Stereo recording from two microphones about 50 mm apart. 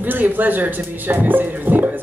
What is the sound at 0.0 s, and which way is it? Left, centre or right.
Speech, right.